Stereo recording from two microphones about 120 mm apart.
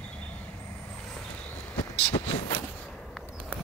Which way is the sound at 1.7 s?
20° left (ahead or behind).